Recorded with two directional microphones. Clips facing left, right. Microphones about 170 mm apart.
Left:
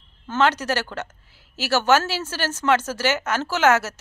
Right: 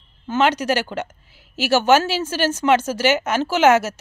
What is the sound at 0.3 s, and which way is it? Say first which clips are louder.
A woman's voice: right 3 dB; 15° right (ahead or behind).